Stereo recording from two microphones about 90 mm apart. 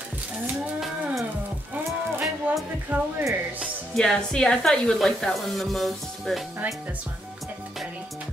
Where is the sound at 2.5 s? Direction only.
20° right (ahead or behind).